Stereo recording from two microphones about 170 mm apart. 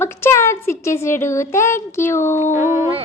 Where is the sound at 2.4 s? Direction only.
45° left (ahead or behind).